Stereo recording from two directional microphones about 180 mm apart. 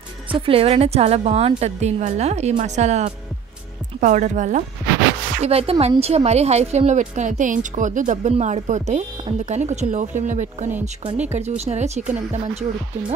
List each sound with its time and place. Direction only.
0.3 s speech: 30° right (ahead or behind)
5.4 s speech: 35° right (ahead or behind)